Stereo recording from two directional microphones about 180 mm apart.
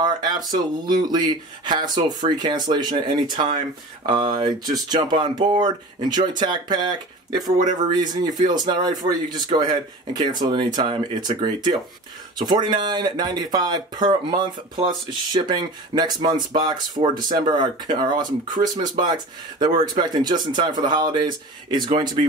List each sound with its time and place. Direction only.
0.0 s speech: 20° right (ahead or behind)